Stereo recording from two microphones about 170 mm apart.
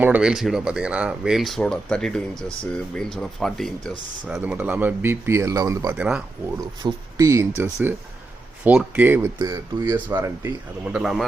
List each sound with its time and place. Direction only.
0.0 s speech: 5° right (ahead or behind)
6.8 s speech: 20° right (ahead or behind)
10.9 s speech: 5° right (ahead or behind)